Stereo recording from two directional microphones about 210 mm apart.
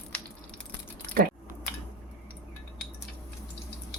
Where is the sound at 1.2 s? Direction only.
45° right (ahead or behind).